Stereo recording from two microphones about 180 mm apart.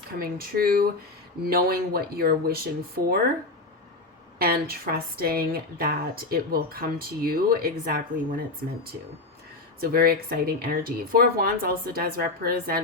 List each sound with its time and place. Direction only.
0.2 s speech: 55° right (ahead or behind)
4.4 s speech: 55° right (ahead or behind)
9.8 s speech: 55° right (ahead or behind)